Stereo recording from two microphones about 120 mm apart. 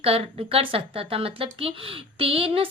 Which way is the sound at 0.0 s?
55° right (ahead or behind).